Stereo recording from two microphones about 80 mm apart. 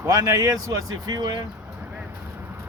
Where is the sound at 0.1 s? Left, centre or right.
Right.